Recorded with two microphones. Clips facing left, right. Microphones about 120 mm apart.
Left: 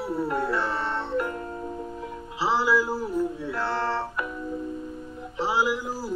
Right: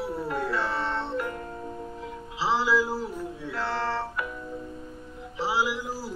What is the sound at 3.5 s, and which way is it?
Music, 15° left (ahead or behind).